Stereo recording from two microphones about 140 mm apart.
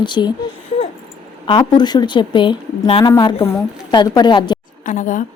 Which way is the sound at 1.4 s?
35° left (ahead or behind).